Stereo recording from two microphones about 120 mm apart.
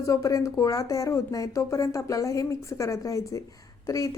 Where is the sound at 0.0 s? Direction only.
30° left (ahead or behind).